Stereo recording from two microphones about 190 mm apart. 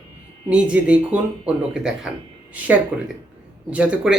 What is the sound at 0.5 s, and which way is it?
Speech, 5° right (ahead or behind).